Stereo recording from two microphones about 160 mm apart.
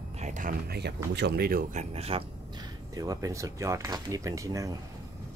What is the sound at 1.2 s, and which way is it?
Speech, 85° right.